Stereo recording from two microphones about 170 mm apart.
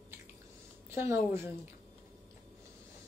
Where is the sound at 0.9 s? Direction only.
15° right (ahead or behind).